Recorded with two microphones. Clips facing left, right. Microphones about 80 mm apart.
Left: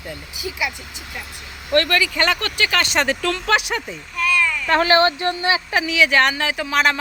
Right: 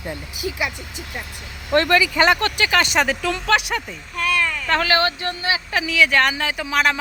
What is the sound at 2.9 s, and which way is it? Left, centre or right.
Speech, centre.